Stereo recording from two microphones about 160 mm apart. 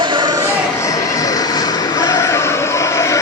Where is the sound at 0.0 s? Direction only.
30° right (ahead or behind).